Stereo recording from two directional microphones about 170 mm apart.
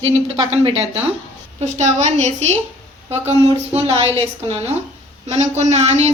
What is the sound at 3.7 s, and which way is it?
Speech, 35° right (ahead or behind).